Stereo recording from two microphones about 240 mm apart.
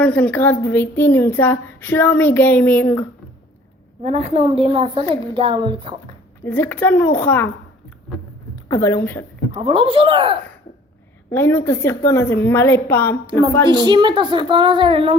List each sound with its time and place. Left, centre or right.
0.0 s a woman's voice: centre
4.0 s a woman's voice: right
6.4 s a woman's voice: centre
8.7 s a woman's voice: centre
9.6 s a woman's voice: right
11.3 s a woman's voice: centre
13.7 s a woman's voice: centre